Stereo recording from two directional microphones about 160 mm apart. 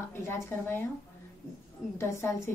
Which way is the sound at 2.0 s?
15° left (ahead or behind).